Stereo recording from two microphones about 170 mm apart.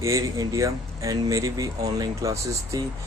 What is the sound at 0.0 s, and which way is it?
Speech, 20° right (ahead or behind).